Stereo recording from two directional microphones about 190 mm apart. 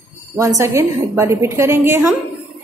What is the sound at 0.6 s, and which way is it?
A woman's voice, 15° right (ahead or behind).